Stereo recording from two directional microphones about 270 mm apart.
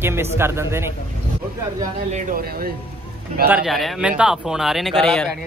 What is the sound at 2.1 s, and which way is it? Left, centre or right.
Speech, right.